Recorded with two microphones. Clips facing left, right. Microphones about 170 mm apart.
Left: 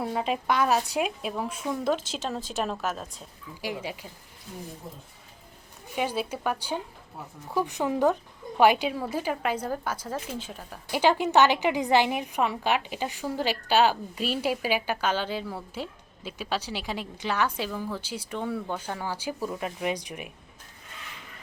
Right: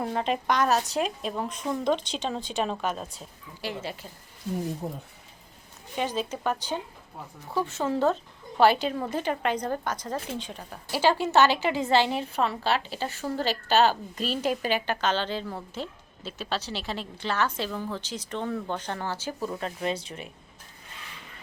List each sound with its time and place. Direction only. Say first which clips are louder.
0.0 s speech: right 1 dB; 5° left (ahead or behind)
3.6 s a woman's voice: left 1 dB; 10° left (ahead or behind)
4.8 s speech: right 8 dB; 65° right (ahead or behind)
6.0 s a woman's voice: even; 10° left (ahead or behind)
10.9 s a woman's voice: left 1 dB; 15° left (ahead or behind)